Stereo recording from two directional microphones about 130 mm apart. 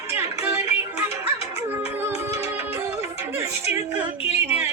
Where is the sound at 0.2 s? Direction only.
20° right (ahead or behind).